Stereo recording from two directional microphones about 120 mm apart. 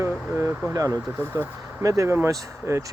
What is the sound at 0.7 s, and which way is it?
Speech, 25° right (ahead or behind).